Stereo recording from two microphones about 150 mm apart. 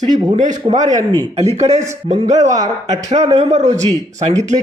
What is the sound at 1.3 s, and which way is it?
Speech, 45° right (ahead or behind).